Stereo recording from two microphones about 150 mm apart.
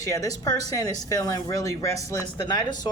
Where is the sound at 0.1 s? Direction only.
25° left (ahead or behind).